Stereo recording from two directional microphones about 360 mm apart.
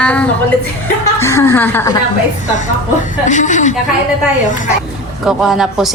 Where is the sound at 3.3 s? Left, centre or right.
Centre.